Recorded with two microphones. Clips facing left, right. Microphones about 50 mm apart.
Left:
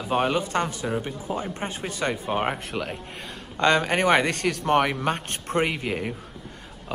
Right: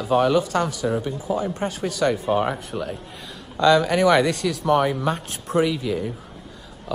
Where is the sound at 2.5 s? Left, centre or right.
Left.